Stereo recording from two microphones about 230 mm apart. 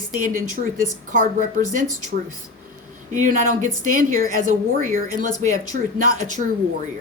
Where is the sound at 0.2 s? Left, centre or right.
Right.